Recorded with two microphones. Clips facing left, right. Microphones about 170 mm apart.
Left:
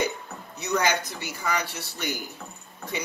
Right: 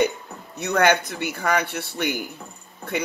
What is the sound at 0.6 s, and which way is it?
Speech, 60° right (ahead or behind).